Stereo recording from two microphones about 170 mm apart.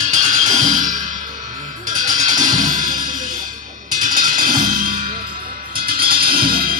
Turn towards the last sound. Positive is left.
turn(degrees=-60)  # may be behind; listen again after turning